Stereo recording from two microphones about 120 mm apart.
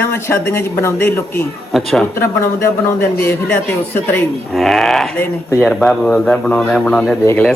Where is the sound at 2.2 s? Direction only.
20° left (ahead or behind).